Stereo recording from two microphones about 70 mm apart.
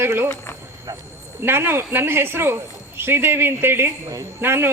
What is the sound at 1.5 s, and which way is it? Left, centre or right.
Speech, right.